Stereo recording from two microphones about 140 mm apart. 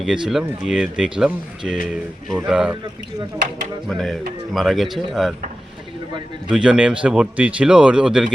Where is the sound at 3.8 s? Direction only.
5° left (ahead or behind).